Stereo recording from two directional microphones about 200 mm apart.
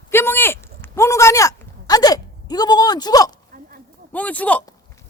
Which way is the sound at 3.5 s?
45° right (ahead or behind).